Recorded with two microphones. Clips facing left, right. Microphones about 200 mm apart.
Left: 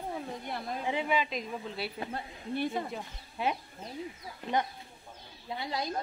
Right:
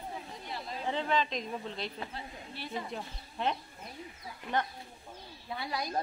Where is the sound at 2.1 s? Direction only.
50° left (ahead or behind).